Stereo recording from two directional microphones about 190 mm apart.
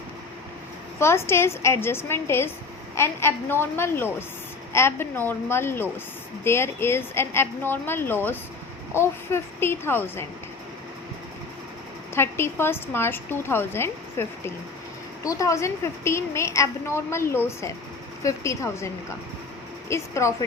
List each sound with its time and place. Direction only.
0.9 s a woman's voice: 15° left (ahead or behind)
12.1 s a woman's voice: 10° left (ahead or behind)
19.9 s a woman's voice: 15° left (ahead or behind)